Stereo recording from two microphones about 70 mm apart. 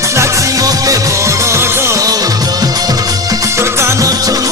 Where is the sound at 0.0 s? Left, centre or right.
Right.